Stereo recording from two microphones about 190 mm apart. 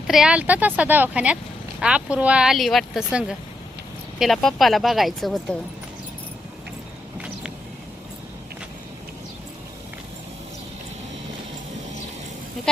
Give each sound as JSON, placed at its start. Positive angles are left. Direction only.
{"t": 0.1, "sound": "speech", "side_deg": -5}